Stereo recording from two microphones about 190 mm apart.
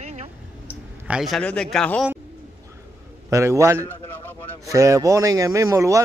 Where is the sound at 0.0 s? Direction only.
35° right (ahead or behind).